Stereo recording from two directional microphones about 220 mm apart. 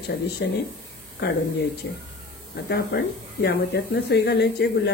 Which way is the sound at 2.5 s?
45° left (ahead or behind).